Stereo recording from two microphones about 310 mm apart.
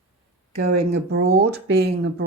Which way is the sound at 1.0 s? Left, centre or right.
Right.